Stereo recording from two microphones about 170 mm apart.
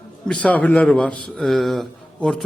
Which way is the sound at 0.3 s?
10° left (ahead or behind).